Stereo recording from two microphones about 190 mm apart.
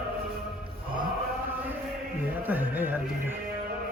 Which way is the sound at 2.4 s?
10° right (ahead or behind).